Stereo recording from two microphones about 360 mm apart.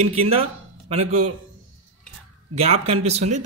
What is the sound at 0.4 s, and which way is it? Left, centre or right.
Speech, centre.